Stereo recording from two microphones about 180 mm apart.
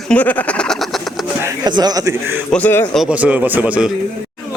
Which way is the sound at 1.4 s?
25° right (ahead or behind).